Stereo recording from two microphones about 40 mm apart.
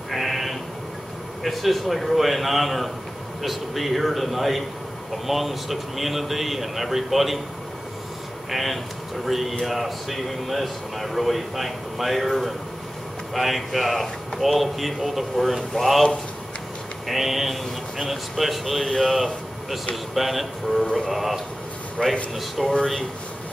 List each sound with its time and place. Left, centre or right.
0.1 s a sound: centre
1.4 s speech: centre
8.5 s speech: centre
22.0 s speech: left
22.6 s speech: centre